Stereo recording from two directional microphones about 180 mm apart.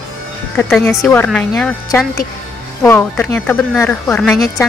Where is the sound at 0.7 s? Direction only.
15° left (ahead or behind).